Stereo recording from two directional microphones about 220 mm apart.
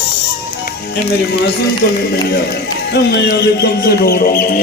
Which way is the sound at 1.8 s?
45° left (ahead or behind).